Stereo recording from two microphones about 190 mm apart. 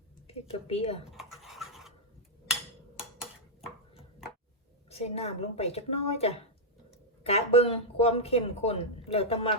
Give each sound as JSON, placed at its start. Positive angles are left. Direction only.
{"t": 0.3, "sound": "speech", "side_deg": 30}
{"t": 1.1, "sound": "a sound", "side_deg": 0}
{"t": 3.0, "sound": "dishes", "side_deg": -5}
{"t": 4.9, "sound": "speech", "side_deg": 30}